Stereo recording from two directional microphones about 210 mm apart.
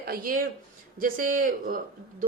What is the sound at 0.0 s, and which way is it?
A woman's voice, 45° right (ahead or behind).